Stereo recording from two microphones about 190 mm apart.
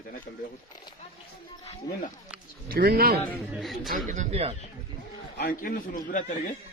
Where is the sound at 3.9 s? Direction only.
40° right (ahead or behind).